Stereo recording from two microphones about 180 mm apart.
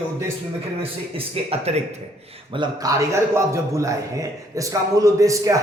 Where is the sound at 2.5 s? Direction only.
25° right (ahead or behind).